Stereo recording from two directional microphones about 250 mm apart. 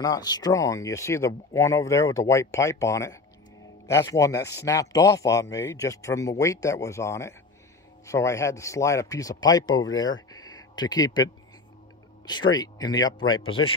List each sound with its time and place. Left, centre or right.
0.0 s speech: centre
10.3 s a sound: centre
12.3 s speech: centre